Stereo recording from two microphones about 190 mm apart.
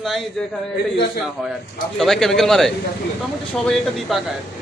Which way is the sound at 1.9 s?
Centre (ahead or behind).